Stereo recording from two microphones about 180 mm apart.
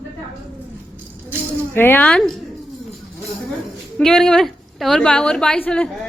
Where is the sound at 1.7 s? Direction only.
10° left (ahead or behind).